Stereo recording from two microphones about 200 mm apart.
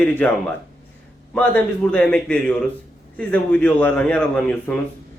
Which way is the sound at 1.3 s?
5° left (ahead or behind).